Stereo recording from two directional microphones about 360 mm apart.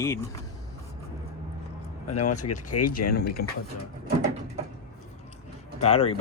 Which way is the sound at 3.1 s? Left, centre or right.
Left.